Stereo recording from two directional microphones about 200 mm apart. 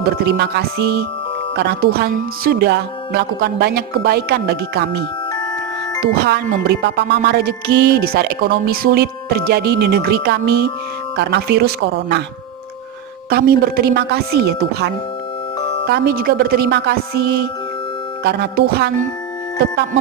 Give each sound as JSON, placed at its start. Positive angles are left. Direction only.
{"t": 0.0, "sound": "music", "side_deg": -55}
{"t": 6.1, "sound": "music", "side_deg": -55}
{"t": 11.1, "sound": "speech", "side_deg": -55}
{"t": 13.3, "sound": "music", "side_deg": -50}
{"t": 15.9, "sound": "music", "side_deg": -50}
{"t": 19.6, "sound": "speech", "side_deg": -55}